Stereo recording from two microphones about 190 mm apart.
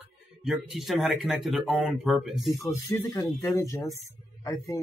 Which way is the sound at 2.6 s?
15° left (ahead or behind).